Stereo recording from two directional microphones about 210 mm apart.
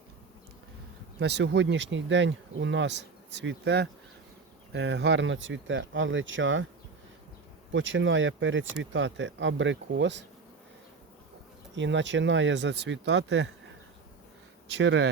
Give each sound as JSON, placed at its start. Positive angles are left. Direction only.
{"t": 1.2, "sound": "speech", "side_deg": -55}
{"t": 7.7, "sound": "speech", "side_deg": -65}
{"t": 11.7, "sound": "speech", "side_deg": -60}
{"t": 14.8, "sound": "speech", "side_deg": -60}